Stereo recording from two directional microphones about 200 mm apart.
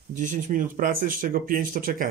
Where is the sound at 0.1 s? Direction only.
40° right (ahead or behind).